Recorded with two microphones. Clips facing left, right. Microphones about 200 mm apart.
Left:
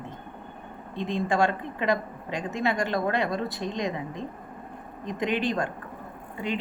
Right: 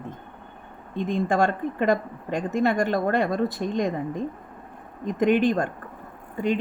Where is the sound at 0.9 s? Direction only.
50° right (ahead or behind).